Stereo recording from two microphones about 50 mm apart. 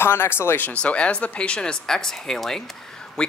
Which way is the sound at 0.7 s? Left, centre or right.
Left.